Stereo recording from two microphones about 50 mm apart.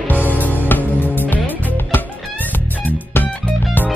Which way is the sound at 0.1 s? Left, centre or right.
Left.